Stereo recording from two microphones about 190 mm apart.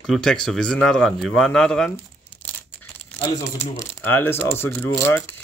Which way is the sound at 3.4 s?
10° left (ahead or behind).